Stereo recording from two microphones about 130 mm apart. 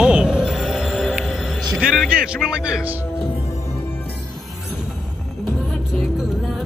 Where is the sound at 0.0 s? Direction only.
5° right (ahead or behind).